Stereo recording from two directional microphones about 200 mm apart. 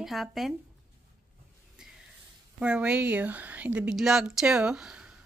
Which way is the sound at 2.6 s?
5° right (ahead or behind).